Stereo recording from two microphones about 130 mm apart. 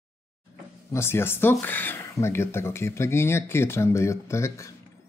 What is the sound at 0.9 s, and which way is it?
Speech, 20° left (ahead or behind).